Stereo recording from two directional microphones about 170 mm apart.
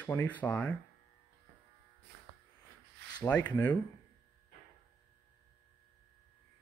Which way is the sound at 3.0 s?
80° right.